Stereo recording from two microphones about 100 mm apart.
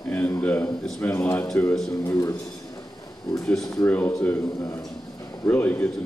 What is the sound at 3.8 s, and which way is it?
Speech, 15° left (ahead or behind).